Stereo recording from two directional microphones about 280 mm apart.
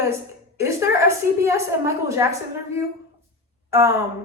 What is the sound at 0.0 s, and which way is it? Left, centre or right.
A woman's voice, centre.